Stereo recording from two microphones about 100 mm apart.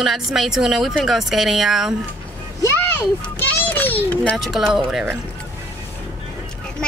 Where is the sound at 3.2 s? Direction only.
20° left (ahead or behind).